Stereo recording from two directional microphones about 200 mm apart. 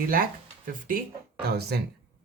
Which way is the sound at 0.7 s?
45° right (ahead or behind).